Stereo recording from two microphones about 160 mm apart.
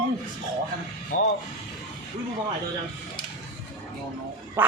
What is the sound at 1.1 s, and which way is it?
Speech, 55° left (ahead or behind).